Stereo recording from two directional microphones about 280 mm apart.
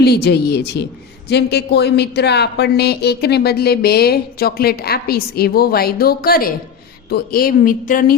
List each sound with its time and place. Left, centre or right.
0.0 s speech: left